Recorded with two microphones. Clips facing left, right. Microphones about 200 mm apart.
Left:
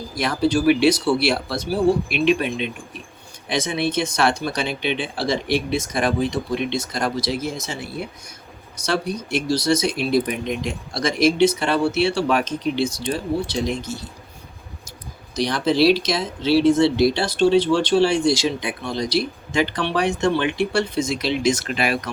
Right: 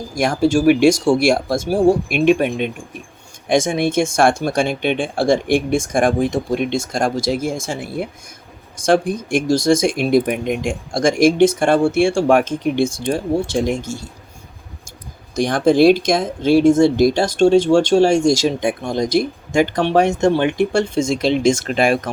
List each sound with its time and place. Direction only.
0.1 s speech: 45° right (ahead or behind)
15.4 s speech: 50° right (ahead or behind)